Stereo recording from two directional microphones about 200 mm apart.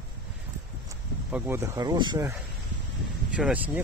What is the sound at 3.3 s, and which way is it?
Speech, 5° right (ahead or behind).